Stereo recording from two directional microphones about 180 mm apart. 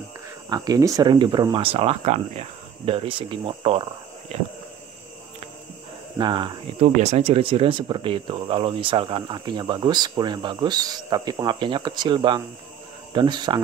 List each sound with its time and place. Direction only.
0.5 s speech: 20° right (ahead or behind)
4.3 s a sound: 35° right (ahead or behind)
6.1 s speech: 25° right (ahead or behind)